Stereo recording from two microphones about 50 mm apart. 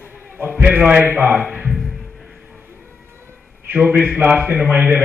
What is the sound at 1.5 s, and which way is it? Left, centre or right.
Music, right.